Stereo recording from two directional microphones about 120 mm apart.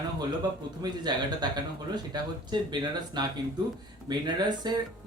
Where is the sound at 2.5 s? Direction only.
40° right (ahead or behind).